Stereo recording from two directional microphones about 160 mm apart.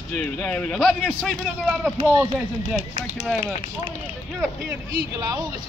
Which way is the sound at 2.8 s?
45° right (ahead or behind).